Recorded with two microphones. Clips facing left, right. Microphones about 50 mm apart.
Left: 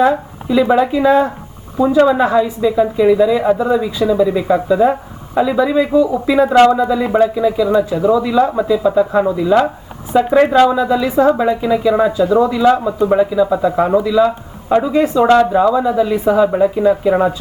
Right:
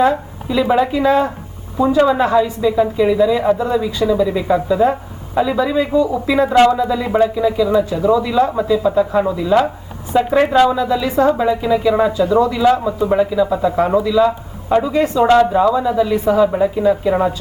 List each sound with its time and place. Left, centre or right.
0.1 s a sound: centre
0.7 s speech: centre
12.1 s speech: centre